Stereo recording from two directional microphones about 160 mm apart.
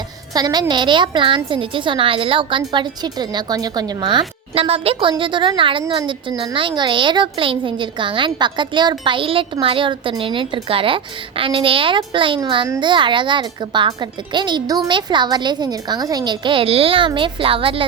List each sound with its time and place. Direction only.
0.3 s a child's voice: 25° right (ahead or behind)